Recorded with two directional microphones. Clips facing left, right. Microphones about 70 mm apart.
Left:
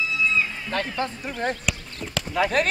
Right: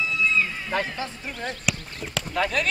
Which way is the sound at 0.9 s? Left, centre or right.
Left.